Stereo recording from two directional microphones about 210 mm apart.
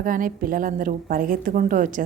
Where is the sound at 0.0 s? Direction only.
40° right (ahead or behind).